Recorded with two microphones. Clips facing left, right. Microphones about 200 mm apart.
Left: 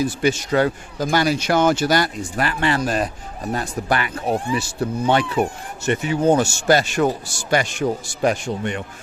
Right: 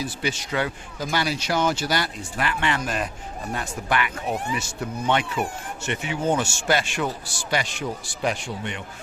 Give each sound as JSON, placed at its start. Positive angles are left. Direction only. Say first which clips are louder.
{"t": 0.0, "sound": "a man's voice", "louder": "left 9 dB", "side_deg": 45}